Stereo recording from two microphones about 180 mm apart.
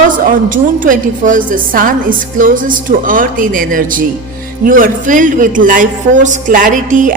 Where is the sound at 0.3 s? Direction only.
50° right (ahead or behind).